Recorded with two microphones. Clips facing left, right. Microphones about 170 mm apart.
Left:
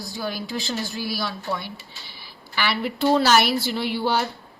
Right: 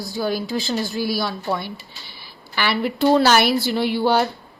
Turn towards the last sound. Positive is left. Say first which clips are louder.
# right 5 dB
turn(degrees=-55)  # may be behind; listen again after turning